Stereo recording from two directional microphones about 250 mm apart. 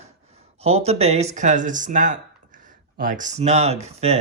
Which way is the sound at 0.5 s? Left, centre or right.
Right.